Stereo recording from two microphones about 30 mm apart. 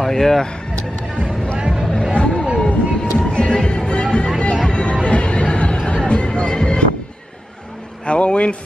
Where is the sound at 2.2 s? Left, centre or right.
Left.